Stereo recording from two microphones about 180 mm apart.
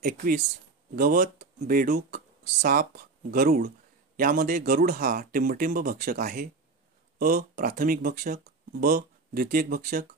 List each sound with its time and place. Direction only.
0.0 s speech: 50° right (ahead or behind)